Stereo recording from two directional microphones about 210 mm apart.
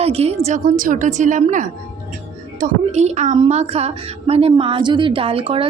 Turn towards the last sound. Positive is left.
turn(degrees=-25)  # may be behind; listen again after turning